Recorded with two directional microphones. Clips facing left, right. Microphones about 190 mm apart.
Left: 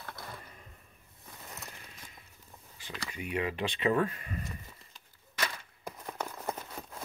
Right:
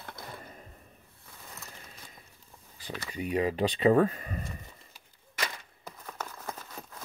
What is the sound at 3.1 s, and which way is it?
Speech, 35° right (ahead or behind).